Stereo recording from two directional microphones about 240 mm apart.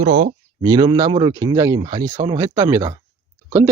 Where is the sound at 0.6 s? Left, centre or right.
Centre.